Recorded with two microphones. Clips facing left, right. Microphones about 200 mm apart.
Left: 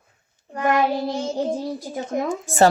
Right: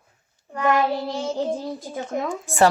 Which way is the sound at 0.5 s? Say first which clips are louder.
Left 1 dB; 20° left (ahead or behind).